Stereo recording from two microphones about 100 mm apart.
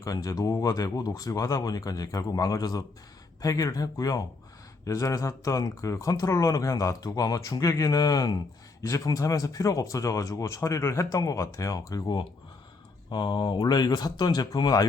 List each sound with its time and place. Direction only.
0.0 s speech: 35° left (ahead or behind)